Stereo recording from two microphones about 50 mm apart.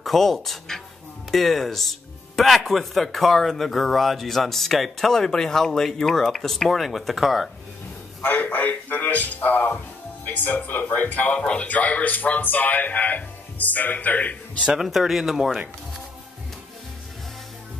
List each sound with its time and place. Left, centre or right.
0.0 s speech: centre
8.2 s speech: left
11.3 s a man's voice: centre
11.6 s speech: left
14.7 s speech: centre